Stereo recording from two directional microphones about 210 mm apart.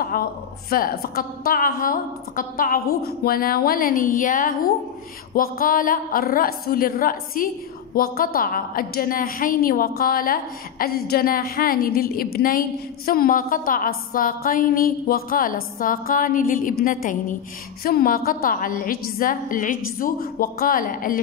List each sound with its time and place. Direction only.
0.1 s a woman's voice: 45° left (ahead or behind)